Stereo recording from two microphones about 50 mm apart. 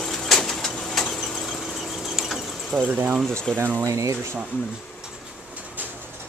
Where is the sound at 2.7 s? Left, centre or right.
Right.